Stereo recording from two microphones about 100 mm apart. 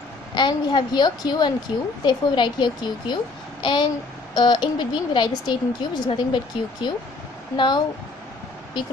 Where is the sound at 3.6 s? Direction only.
50° left (ahead or behind).